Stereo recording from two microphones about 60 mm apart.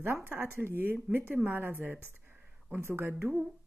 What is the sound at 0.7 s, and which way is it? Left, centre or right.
A woman's voice, right.